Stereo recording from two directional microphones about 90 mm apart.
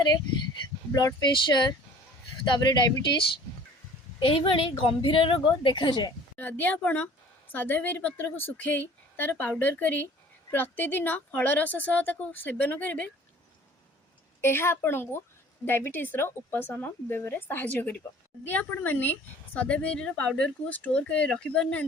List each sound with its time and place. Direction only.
0.9 s speech: 50° left (ahead or behind)
2.6 s speech: 40° left (ahead or behind)
4.2 s a woman's voice: 75° left (ahead or behind)
6.3 s a woman's voice: 20° left (ahead or behind)
14.4 s a woman's voice: 25° left (ahead or behind); by 21.8 s 10° left (ahead or behind)